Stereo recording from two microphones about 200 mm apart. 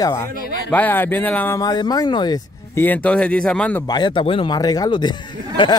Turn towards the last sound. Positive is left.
turn(degrees=20)  # may be behind; listen again after turning